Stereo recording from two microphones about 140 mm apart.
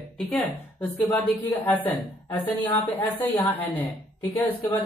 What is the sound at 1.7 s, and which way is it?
A woman's voice, 10° left (ahead or behind).